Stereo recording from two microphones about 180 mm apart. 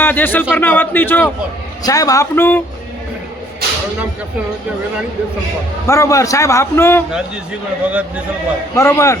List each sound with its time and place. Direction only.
0.0 s a man's voice: 10° left (ahead or behind)
5.9 s a man's voice: 15° left (ahead or behind)
7.9 s a man's voice: 5° right (ahead or behind)
8.7 s a man's voice: 15° left (ahead or behind)